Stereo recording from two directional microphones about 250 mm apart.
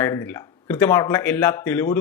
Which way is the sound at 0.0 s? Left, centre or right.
Centre.